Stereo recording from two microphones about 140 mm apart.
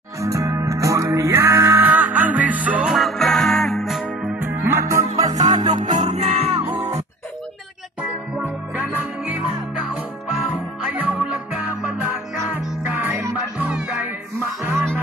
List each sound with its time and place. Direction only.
0.2 s music: 25° right (ahead or behind)
5.8 s music: 60° right (ahead or behind)
6.6 s music: 25° right (ahead or behind)
8.0 s music: 10° right (ahead or behind)
10.9 s music: 10° right (ahead or behind)
13.1 s music: 15° right (ahead or behind)